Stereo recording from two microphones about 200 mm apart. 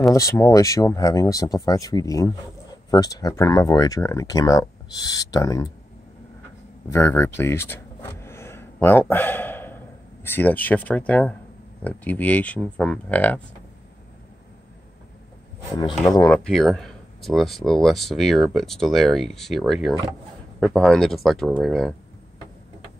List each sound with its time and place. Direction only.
0.1 s speech: 15° left (ahead or behind)
6.9 s speech: 10° left (ahead or behind)
16.3 s speech: centre (ahead or behind)